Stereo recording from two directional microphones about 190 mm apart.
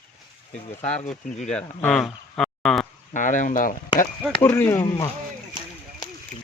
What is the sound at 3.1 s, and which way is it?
Speech, 40° left (ahead or behind).